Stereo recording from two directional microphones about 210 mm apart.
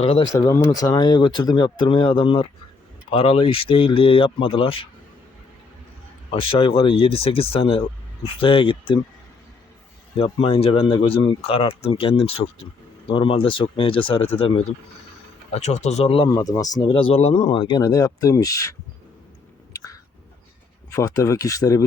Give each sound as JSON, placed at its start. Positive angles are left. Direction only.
{"t": 0.0, "sound": "speech", "side_deg": 30}
{"t": 0.3, "sound": "speech", "side_deg": 15}
{"t": 6.3, "sound": "speech", "side_deg": 25}
{"t": 10.2, "sound": "speech", "side_deg": 25}
{"t": 19.7, "sound": "a sound", "side_deg": 15}
{"t": 20.9, "sound": "speech", "side_deg": 15}